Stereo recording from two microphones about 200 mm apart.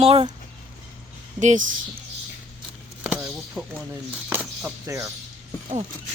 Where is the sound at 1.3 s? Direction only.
40° right (ahead or behind).